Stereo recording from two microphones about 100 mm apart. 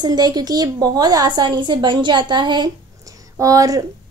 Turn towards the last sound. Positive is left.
turn(degrees=-35)  # may be behind; listen again after turning